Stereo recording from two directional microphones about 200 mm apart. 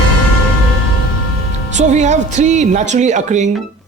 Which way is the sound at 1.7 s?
35° right (ahead or behind).